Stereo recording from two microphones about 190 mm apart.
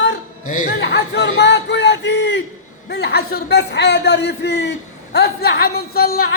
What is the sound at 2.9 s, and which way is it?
A man's voice, 60° left (ahead or behind).